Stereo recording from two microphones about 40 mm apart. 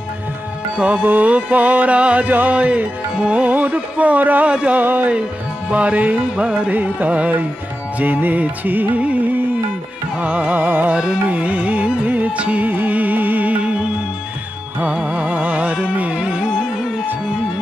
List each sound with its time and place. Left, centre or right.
0.7 s music: right
2.2 s music: right
2.5 s music: right
3.4 s music: right
9.0 s music: right
12.6 s music: right
15.0 s music: right
16.3 s music: centre